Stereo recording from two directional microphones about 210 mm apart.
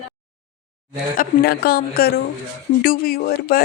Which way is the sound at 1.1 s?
45° left (ahead or behind).